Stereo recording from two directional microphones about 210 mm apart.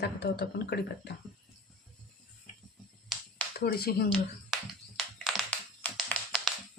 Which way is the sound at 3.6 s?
45° left (ahead or behind).